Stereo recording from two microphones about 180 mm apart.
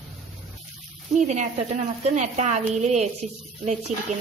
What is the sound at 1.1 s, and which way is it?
A woman's voice, 40° right (ahead or behind).